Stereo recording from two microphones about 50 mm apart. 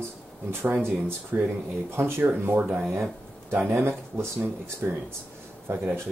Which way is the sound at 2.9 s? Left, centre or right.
Right.